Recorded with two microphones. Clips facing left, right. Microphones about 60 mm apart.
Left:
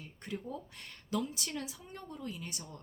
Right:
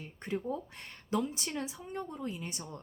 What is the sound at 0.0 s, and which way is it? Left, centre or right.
A woman's voice, right.